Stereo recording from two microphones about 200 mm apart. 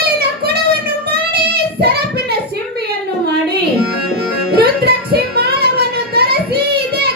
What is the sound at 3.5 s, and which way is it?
Music, 55° right (ahead or behind).